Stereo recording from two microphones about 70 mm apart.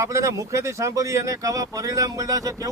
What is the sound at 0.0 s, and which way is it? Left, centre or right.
Speech, right.